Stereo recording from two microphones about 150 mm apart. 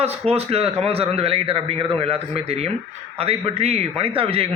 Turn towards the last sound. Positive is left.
turn(degrees=-35)  # may be behind; listen again after turning